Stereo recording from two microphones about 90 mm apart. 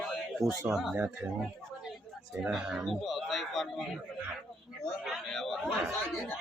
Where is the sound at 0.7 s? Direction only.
Centre (ahead or behind).